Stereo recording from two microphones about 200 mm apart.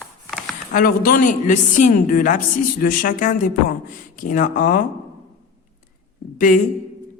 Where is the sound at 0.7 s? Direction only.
45° left (ahead or behind).